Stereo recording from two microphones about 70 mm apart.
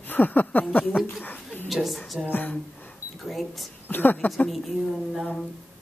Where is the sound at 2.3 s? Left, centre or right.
Left.